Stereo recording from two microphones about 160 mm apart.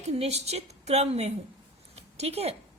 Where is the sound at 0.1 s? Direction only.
40° right (ahead or behind).